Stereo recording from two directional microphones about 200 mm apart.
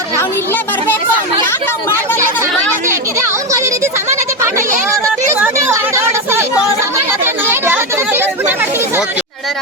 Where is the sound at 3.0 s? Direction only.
15° right (ahead or behind).